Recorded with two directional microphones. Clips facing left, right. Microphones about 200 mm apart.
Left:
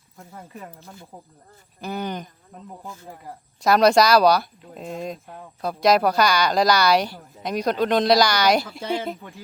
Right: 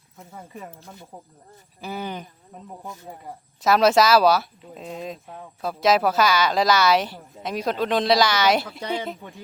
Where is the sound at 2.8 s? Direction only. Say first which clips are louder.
Right 2 dB; 20° right (ahead or behind).